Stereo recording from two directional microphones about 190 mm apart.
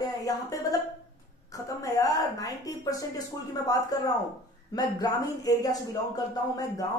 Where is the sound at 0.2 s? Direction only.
20° left (ahead or behind).